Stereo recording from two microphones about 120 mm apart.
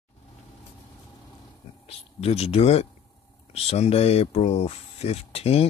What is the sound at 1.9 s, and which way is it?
Speech, 60° left (ahead or behind).